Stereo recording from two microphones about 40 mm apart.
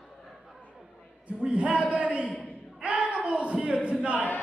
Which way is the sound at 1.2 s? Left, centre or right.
Right.